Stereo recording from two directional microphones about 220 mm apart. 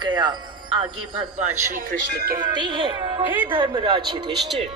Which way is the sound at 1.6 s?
35° right (ahead or behind).